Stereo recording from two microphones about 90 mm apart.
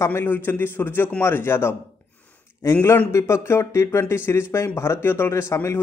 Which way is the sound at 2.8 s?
30° left (ahead or behind).